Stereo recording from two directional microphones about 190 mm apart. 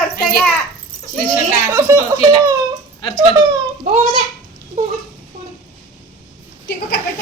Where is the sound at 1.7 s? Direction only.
15° right (ahead or behind).